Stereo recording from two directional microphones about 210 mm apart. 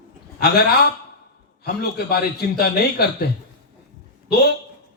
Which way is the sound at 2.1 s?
50° left (ahead or behind).